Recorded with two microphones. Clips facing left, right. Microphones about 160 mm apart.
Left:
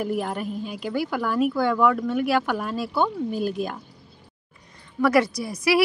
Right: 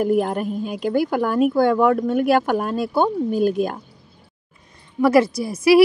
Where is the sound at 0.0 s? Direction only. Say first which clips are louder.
Right 7 dB; 45° right (ahead or behind).